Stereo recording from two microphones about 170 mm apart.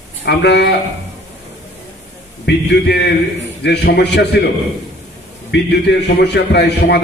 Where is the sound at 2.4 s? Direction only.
85° left.